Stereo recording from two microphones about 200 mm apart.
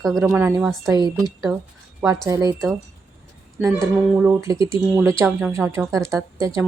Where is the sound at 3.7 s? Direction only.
10° right (ahead or behind).